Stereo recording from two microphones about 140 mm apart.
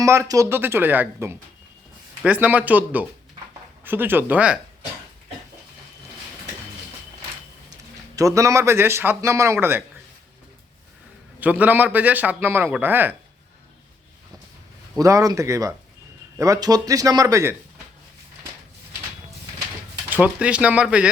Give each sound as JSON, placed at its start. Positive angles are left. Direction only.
{"t": 0.0, "sound": "a man's voice", "side_deg": -20}
{"t": 8.1, "sound": "speech", "side_deg": -25}
{"t": 11.3, "sound": "a man's voice", "side_deg": -10}
{"t": 14.9, "sound": "speech", "side_deg": -25}
{"t": 20.1, "sound": "a man's voice", "side_deg": -10}